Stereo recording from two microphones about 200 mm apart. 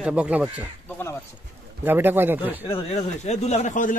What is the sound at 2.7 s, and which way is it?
Speech, 30° left (ahead or behind).